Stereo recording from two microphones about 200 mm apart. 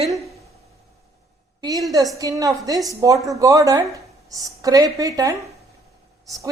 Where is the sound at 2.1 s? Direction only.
15° right (ahead or behind).